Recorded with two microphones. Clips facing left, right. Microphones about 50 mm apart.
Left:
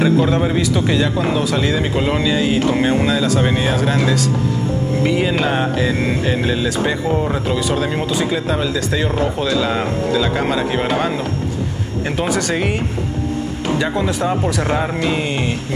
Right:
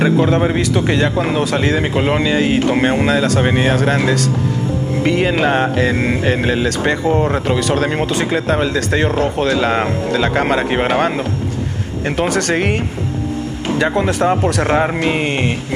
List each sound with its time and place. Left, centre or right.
0.0 s a man's voice: right
5.0 s speech: right
13.8 s a man's voice: right